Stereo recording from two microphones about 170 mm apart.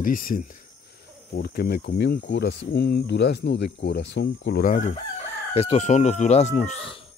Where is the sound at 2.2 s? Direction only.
90° left.